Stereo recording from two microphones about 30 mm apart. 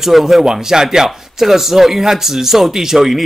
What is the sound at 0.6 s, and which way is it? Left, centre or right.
Speech, centre.